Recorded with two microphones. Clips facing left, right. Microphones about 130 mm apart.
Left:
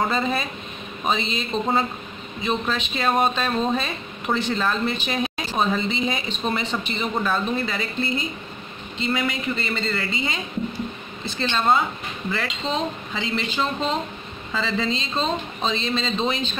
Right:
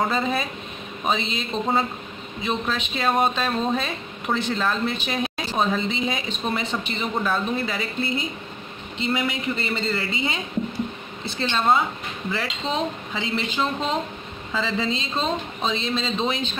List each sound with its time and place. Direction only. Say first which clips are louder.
0.0 s a woman's voice: even; centre (ahead or behind)
8.9 s speech: even; 15° right (ahead or behind)